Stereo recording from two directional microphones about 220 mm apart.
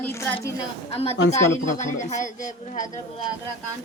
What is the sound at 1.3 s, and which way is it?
Speech, 35° left (ahead or behind).